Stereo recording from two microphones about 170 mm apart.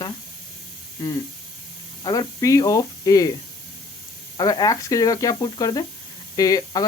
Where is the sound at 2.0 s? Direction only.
20° left (ahead or behind).